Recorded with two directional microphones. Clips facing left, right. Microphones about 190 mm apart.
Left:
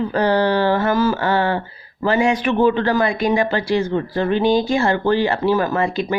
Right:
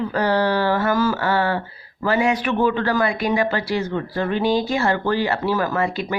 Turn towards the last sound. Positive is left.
turn(degrees=25)  # may be behind; listen again after turning